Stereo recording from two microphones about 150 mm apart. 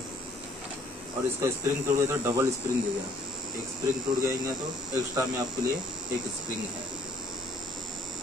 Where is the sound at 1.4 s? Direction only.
20° right (ahead or behind).